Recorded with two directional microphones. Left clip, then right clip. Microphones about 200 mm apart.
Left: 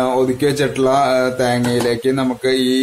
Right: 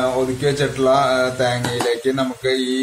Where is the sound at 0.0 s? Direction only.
45° left (ahead or behind).